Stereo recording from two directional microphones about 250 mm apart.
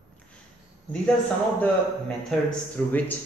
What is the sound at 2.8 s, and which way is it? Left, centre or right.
Speech, centre.